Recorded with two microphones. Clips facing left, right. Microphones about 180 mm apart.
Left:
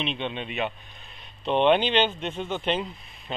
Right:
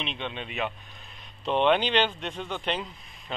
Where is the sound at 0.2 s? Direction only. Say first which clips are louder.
Left 4 dB; 25° left (ahead or behind).